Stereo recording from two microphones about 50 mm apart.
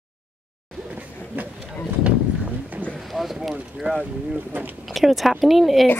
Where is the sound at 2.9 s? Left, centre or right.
Centre.